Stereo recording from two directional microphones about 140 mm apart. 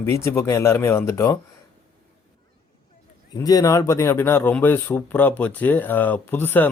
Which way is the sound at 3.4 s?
25° left (ahead or behind).